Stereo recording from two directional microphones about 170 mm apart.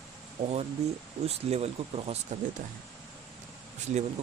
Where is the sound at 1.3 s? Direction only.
40° right (ahead or behind).